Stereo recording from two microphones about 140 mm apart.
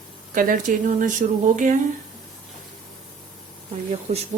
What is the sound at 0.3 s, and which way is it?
Speech, 70° right (ahead or behind).